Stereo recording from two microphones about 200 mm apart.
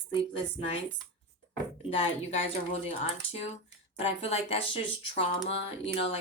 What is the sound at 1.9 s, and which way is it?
A woman's voice, 30° left (ahead or behind).